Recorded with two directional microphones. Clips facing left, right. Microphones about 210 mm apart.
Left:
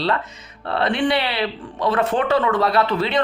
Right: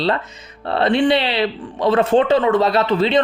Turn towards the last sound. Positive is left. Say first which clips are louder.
# right 3 dB
turn(degrees=-25)  # may be behind; listen again after turning